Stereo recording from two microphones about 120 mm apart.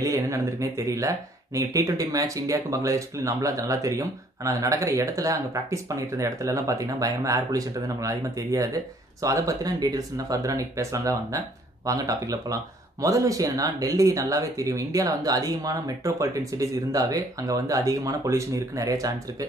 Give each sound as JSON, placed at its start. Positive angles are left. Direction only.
{"t": 0.0, "sound": "speech", "side_deg": -25}